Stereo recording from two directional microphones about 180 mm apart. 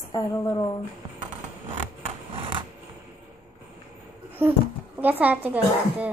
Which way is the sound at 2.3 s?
30° right (ahead or behind).